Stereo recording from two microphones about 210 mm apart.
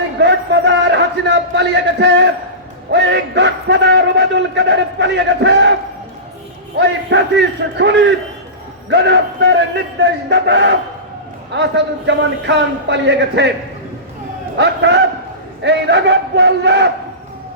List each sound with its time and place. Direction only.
0.2 s a sound: 55° right (ahead or behind)
2.9 s a man's voice: 55° right (ahead or behind)
6.7 s a man's voice: 55° right (ahead or behind)
14.6 s a man's voice: 55° right (ahead or behind)